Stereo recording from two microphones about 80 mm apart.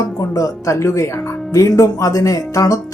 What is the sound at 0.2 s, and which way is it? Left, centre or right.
Speech, left.